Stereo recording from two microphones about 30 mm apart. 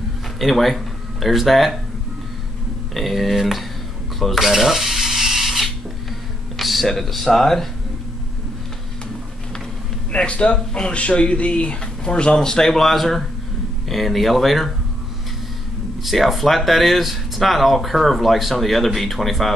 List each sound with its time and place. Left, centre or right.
0.4 s speech: centre
2.9 s speech: centre
4.5 s a sound: centre
6.9 s speech: centre
10.1 s speech: left
11.8 s speech: left
12.4 s speech: centre
16.0 s speech: centre